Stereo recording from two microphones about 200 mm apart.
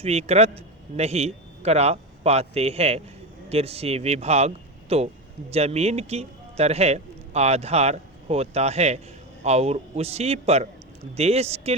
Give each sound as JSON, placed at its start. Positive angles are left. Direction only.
{"t": 0.0, "sound": "a man's voice", "side_deg": -30}